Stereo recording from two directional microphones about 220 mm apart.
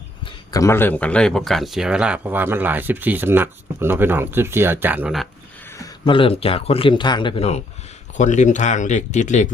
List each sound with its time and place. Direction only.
0.3 s speech: 15° left (ahead or behind); by 5.3 s centre (ahead or behind)
5.6 s speech: 15° left (ahead or behind); by 9.5 s 35° left (ahead or behind)